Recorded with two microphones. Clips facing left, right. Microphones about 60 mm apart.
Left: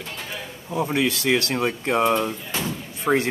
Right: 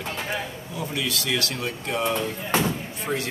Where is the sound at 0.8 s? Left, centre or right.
Left.